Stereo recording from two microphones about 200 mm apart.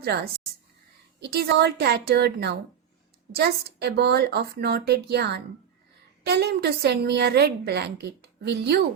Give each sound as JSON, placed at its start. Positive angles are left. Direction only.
{"t": 0.0, "sound": "a woman's voice", "side_deg": -55}